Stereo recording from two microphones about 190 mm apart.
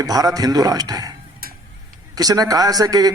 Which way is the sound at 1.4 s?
50° right (ahead or behind).